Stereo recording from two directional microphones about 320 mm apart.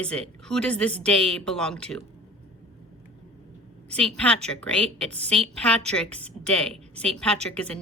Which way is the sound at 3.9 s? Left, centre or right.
Centre.